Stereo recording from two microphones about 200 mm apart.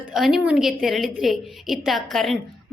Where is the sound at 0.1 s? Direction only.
Centre (ahead or behind).